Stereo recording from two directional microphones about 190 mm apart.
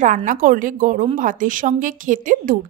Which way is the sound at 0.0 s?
45° right (ahead or behind).